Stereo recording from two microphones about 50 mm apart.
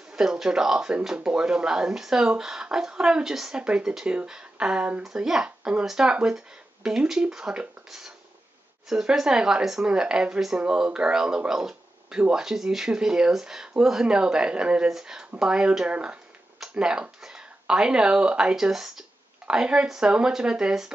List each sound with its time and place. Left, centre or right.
0.1 s speech: centre
3.6 s speech: right
14.9 s speech: centre